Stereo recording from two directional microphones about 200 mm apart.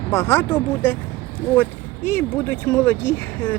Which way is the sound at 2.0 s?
10° left (ahead or behind).